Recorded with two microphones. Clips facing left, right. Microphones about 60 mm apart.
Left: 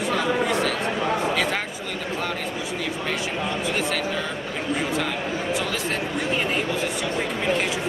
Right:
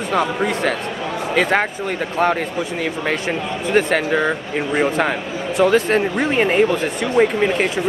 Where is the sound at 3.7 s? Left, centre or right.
Right.